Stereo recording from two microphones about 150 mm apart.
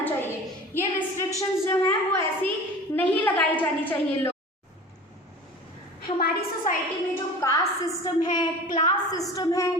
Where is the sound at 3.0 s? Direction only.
10° left (ahead or behind).